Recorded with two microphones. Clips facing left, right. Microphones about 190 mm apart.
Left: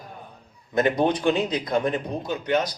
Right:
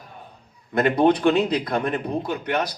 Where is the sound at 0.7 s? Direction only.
60° right (ahead or behind).